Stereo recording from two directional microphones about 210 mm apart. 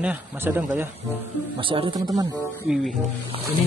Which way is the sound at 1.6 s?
25° right (ahead or behind).